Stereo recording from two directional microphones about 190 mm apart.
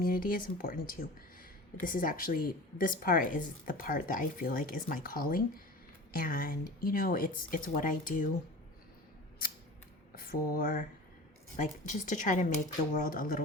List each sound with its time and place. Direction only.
0.0 s speech: 50° left (ahead or behind)
10.2 s speech: 50° left (ahead or behind)
11.9 s a woman's voice: 40° left (ahead or behind)